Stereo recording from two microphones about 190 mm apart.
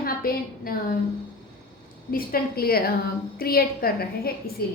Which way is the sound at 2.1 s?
50° left (ahead or behind).